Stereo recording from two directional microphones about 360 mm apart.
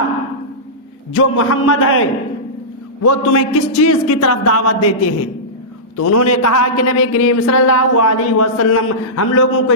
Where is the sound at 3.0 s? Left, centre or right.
Left.